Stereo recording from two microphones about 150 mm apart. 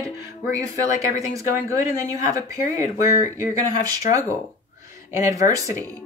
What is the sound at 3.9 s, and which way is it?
Speech, 20° right (ahead or behind).